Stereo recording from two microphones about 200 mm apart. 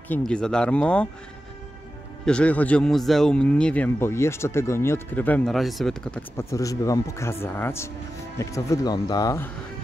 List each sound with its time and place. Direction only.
0.1 s speech: 5° left (ahead or behind)
2.2 s speech: 5° left (ahead or behind)
6.5 s speech: 15° left (ahead or behind)